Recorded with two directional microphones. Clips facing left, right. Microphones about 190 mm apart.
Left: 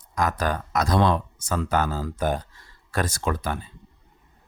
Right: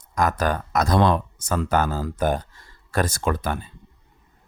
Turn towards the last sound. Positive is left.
turn(degrees=-50)  # may be behind; listen again after turning